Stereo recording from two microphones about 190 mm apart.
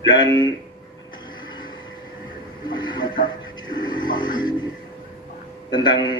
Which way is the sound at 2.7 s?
25° left (ahead or behind).